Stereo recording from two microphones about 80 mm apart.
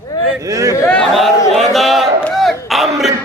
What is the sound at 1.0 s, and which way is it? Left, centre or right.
A man's voice, centre.